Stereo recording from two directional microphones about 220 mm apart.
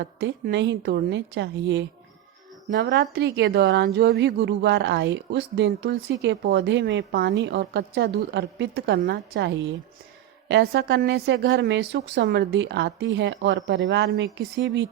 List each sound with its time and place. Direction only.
0.0 s a woman's voice: 50° right (ahead or behind)